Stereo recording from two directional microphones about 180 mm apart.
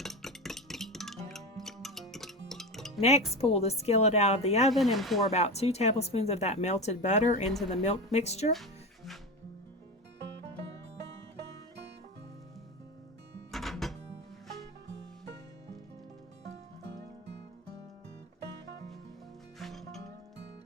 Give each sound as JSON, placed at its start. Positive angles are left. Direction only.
{"t": 0.0, "sound": "music", "side_deg": 0}
{"t": 3.0, "sound": "speech", "side_deg": 35}
{"t": 4.7, "sound": "speech", "side_deg": 0}
{"t": 5.3, "sound": "speech", "side_deg": 35}
{"t": 13.5, "sound": "music", "side_deg": 0}
{"t": 19.5, "sound": "music", "side_deg": 0}